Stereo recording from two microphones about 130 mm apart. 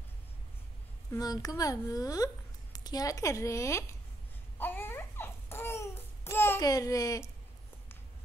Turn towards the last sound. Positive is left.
turn(degrees=25)  # may be behind; listen again after turning